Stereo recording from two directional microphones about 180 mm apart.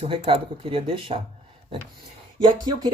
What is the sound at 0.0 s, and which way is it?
Speech, 30° right (ahead or behind).